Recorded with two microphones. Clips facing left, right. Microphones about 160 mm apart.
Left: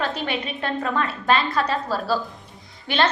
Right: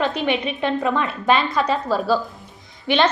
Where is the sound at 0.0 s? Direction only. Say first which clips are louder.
Right 5 dB; 15° right (ahead or behind).